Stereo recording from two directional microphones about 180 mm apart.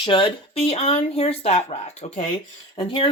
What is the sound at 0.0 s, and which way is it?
Speech, 30° left (ahead or behind).